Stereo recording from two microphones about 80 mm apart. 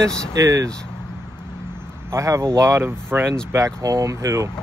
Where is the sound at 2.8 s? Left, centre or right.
Right.